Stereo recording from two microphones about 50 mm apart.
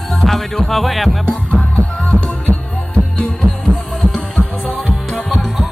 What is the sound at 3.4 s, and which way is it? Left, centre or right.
Music, right.